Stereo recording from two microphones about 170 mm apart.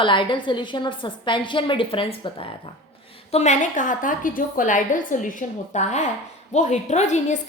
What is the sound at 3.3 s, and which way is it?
A woman's voice, 40° left (ahead or behind).